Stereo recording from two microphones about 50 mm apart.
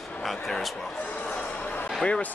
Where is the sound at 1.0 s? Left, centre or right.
Left.